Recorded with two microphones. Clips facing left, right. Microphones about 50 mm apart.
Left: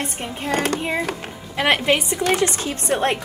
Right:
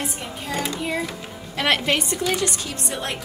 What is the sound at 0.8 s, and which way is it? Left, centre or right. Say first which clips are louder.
Speech: left 2 dB; left.